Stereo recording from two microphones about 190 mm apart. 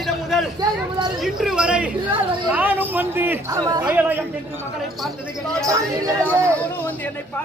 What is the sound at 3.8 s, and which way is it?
Speech, 10° right (ahead or behind).